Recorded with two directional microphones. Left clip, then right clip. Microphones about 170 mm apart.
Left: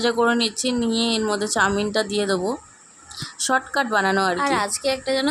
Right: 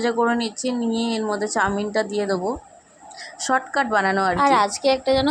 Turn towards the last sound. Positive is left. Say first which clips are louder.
# right 3 dB
turn(degrees=-15)  # may be behind; listen again after turning